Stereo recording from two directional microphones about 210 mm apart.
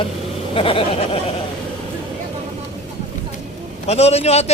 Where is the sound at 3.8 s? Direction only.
30° left (ahead or behind).